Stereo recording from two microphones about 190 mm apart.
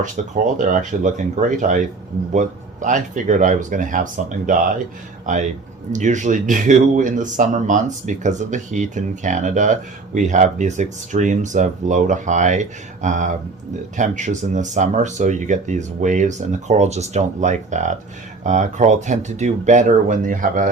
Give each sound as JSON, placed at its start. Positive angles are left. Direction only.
{"t": 0.0, "sound": "speech", "side_deg": -40}